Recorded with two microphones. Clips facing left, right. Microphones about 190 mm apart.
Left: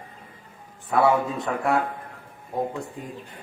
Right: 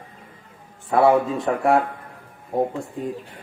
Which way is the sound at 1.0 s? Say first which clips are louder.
Right 4 dB; 25° right (ahead or behind).